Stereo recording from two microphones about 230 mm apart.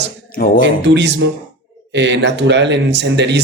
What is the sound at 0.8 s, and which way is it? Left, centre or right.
Speech, right.